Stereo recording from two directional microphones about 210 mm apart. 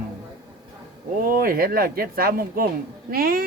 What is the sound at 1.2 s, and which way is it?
A woman's voice, 45° right (ahead or behind).